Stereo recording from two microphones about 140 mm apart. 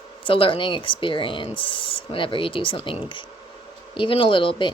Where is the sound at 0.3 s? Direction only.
40° left (ahead or behind).